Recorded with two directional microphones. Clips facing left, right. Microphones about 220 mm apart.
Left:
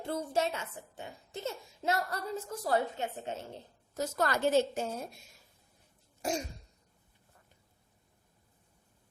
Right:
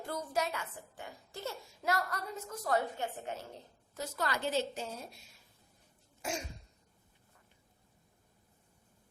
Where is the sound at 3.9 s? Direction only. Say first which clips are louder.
Left 5 dB; 45° left (ahead or behind).